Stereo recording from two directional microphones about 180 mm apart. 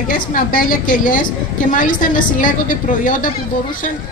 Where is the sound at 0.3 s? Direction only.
50° left (ahead or behind).